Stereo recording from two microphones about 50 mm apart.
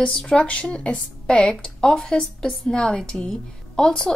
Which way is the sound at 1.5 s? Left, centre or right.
Centre.